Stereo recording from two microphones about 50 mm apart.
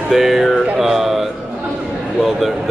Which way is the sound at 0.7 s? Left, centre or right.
Centre.